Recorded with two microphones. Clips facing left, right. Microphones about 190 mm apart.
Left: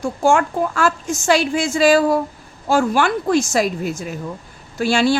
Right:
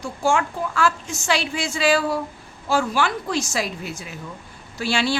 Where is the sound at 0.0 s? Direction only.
50° left (ahead or behind).